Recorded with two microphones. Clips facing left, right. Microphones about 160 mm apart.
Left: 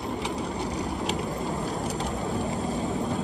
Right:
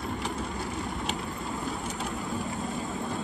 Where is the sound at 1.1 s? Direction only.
40° left (ahead or behind).